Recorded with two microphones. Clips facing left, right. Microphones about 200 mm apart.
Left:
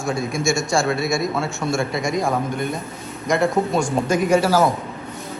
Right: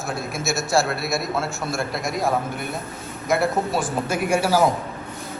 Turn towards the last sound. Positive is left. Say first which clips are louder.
# left 3 dB
turn(degrees=-10)  # may be behind; listen again after turning